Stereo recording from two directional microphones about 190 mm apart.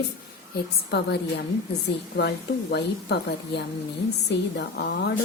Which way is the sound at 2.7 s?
60° left (ahead or behind).